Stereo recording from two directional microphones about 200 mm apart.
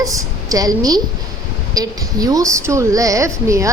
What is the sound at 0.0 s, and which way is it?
A woman's voice, 15° right (ahead or behind).